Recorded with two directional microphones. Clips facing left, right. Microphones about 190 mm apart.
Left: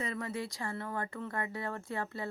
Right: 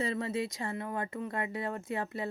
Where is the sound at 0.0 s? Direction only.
25° right (ahead or behind).